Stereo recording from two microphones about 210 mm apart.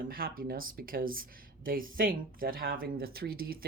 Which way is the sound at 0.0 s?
45° right (ahead or behind).